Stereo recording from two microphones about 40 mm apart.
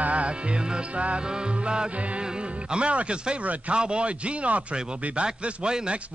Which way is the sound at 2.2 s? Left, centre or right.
Right.